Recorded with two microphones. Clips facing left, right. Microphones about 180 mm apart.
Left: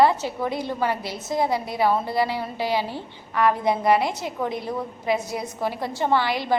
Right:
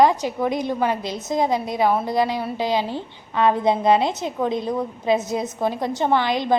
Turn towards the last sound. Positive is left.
turn(degrees=-20)  # may be behind; listen again after turning